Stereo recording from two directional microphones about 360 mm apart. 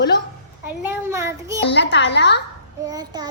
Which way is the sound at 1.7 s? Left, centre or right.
Left.